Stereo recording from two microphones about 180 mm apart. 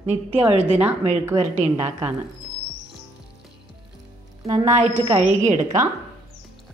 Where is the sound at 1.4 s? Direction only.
40° right (ahead or behind).